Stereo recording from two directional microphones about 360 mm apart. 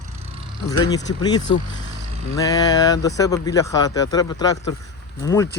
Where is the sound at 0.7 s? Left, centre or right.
Centre.